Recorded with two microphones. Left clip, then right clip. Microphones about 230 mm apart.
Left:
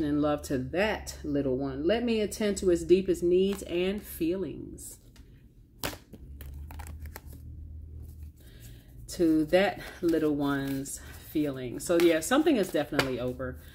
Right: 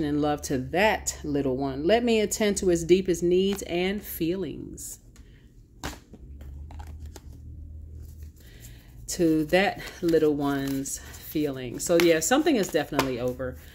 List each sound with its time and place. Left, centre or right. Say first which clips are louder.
0.0 s speech: right 2 dB; right
9.0 s speech: right 2 dB; right